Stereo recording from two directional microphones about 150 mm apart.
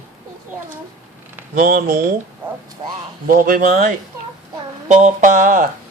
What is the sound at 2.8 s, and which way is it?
Speech, 30° right (ahead or behind).